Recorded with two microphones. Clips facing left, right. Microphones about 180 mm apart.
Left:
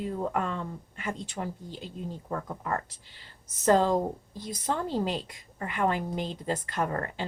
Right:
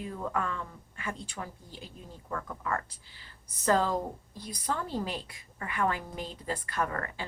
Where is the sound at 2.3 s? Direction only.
35° left (ahead or behind).